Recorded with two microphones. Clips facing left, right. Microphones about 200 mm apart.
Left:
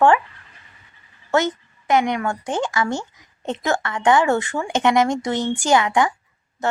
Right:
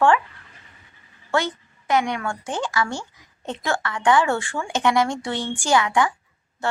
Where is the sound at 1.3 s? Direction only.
20° left (ahead or behind).